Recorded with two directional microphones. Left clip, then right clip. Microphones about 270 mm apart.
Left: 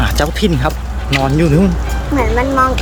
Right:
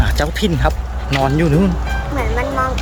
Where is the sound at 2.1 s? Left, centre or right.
Left.